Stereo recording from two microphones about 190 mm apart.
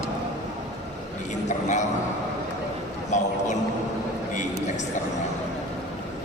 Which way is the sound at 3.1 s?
40° left (ahead or behind).